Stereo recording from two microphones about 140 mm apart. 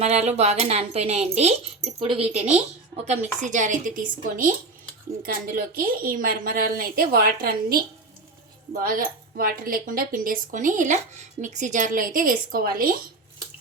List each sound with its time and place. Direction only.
0.0 s speech: 50° right (ahead or behind)
3.1 s speech: 60° right (ahead or behind)
5.7 s a woman's voice: 90° right